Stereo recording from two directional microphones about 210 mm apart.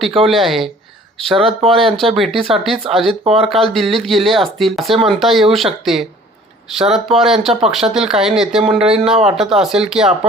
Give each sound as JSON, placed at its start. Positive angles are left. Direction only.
{"t": 0.3, "sound": "speech", "side_deg": 0}
{"t": 3.2, "sound": "speech", "side_deg": -30}
{"t": 3.5, "sound": "speech", "side_deg": 0}